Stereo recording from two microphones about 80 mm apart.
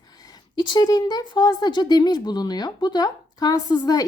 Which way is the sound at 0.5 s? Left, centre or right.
Left.